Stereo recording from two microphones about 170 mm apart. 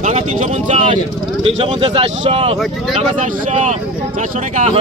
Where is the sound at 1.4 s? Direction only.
35° right (ahead or behind).